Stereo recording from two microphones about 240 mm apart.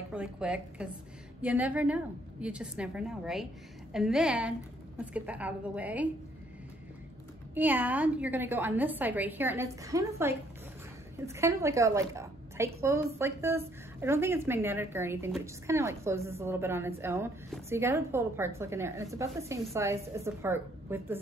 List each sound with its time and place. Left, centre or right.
0.1 s a woman's voice: centre
7.5 s a woman's voice: centre